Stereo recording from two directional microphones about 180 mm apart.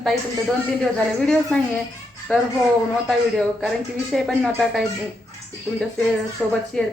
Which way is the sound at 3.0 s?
Centre (ahead or behind).